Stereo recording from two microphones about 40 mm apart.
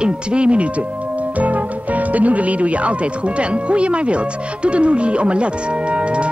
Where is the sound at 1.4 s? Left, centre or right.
Right.